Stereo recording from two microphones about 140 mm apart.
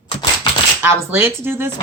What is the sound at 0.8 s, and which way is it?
Speech, 15° right (ahead or behind).